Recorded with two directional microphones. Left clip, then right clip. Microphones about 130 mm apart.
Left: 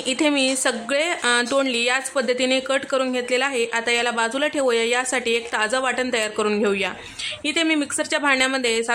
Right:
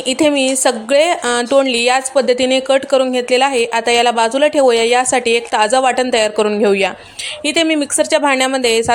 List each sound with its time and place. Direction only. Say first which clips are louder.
0.1 s a woman's voice: right 7 dB; 25° right (ahead or behind)